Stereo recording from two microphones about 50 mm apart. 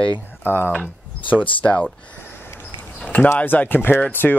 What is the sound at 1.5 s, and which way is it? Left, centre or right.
Speech, left.